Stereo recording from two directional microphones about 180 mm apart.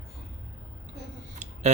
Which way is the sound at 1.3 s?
40° right (ahead or behind).